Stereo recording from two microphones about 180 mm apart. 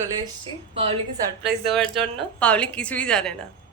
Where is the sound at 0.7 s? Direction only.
30° right (ahead or behind).